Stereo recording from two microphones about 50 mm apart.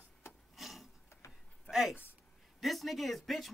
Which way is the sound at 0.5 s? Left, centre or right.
Centre.